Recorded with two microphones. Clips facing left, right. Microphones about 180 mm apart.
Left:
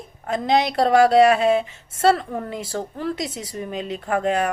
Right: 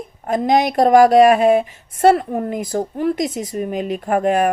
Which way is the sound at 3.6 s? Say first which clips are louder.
Right 5 dB; 50° right (ahead or behind).